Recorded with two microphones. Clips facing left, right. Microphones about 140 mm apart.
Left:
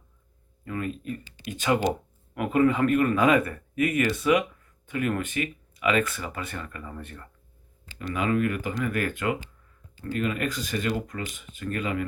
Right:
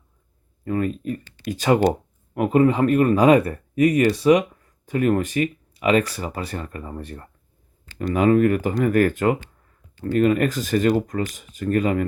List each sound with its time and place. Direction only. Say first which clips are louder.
0.6 s speech: right 8 dB; 35° right (ahead or behind)